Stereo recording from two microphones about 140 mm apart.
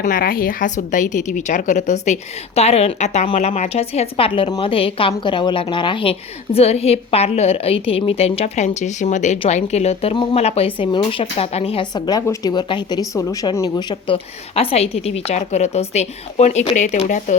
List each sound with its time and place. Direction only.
0.0 s a woman's voice: 85° left; by 2.1 s 60° left (ahead or behind)
2.6 s a woman's voice: 50° left (ahead or behind)
11.9 s a woman's voice: 30° left (ahead or behind); by 17.3 s 60° left (ahead or behind)